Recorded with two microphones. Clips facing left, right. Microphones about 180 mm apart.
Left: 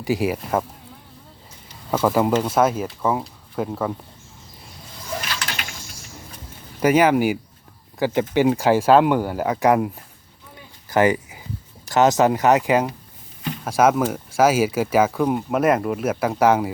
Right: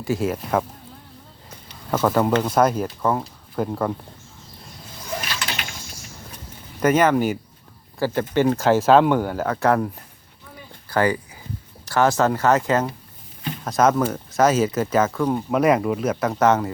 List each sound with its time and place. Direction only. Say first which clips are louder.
0.0 s speech: left 1 dB; 15° left (ahead or behind)
1.9 s speech: even; 5° left (ahead or behind)
6.7 s speech: left 1 dB; 10° left (ahead or behind)
10.8 s a sound: left 3 dB; 20° left (ahead or behind)
11.9 s speech: left 2 dB; 20° left (ahead or behind)
15.4 s speech: right 4 dB; 5° left (ahead or behind)